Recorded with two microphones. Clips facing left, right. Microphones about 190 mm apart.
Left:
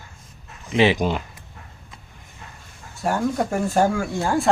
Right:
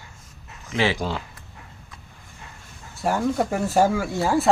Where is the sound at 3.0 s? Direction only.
Centre (ahead or behind).